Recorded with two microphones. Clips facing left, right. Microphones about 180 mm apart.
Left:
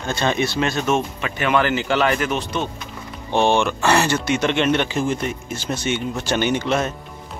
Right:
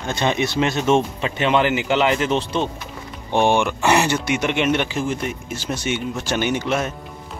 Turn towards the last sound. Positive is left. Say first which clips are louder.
# left 1 dB
turn(degrees=-5)  # may be behind; listen again after turning